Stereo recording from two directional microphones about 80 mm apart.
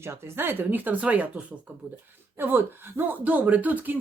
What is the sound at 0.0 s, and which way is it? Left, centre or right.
Speech, right.